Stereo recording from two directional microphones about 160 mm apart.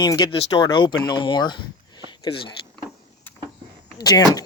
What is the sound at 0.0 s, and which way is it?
Speech, 30° left (ahead or behind).